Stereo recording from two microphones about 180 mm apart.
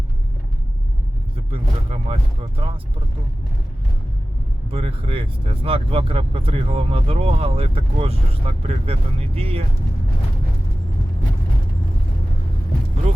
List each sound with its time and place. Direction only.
1.5 s speech: 35° right (ahead or behind)
4.7 s speech: 30° right (ahead or behind)